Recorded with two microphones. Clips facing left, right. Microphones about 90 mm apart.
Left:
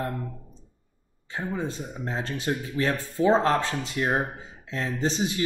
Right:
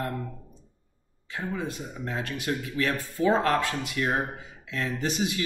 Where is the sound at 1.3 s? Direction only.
30° left (ahead or behind).